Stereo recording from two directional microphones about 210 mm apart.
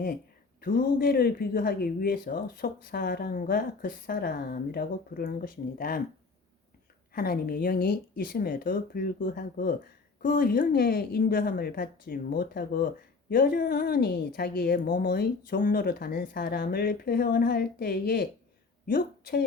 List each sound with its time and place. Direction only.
0.6 s speech: 40° left (ahead or behind)
7.1 s a woman's voice: 45° left (ahead or behind)